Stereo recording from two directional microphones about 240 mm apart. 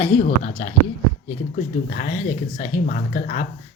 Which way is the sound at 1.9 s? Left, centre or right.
Left.